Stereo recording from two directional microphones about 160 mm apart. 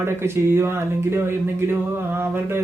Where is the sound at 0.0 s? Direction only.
15° right (ahead or behind).